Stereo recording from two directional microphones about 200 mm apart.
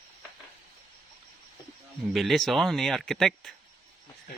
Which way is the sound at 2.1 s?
Centre (ahead or behind).